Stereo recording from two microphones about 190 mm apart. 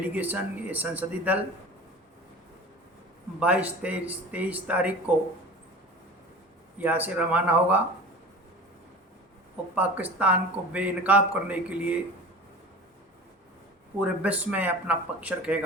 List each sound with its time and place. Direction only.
0.0 s a man's voice: 10° right (ahead or behind)
3.4 s a man's voice: 5° right (ahead or behind)
6.7 s a man's voice: 10° right (ahead or behind)
9.7 s a man's voice: 10° right (ahead or behind)
14.2 s a man's voice: 5° right (ahead or behind)